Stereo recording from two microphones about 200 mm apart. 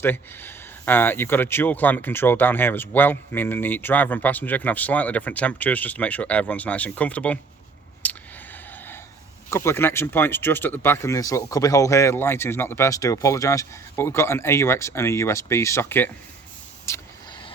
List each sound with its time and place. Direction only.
0.0 s speech: 10° left (ahead or behind)
8.0 s a sound: 10° left (ahead or behind)
9.5 s speech: 15° left (ahead or behind)
16.9 s vehicle: 15° left (ahead or behind)